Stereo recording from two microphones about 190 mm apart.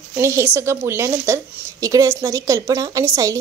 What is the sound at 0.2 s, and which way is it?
A woman's voice, 15° right (ahead or behind).